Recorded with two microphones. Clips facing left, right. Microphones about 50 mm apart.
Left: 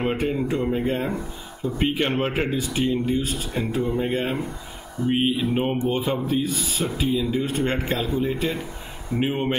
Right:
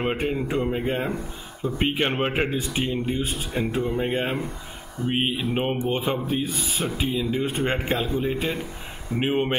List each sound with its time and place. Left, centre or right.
0.0 s speech: centre
6.4 s speech: right
7.2 s speech: centre
7.9 s speech: centre
9.2 s speech: centre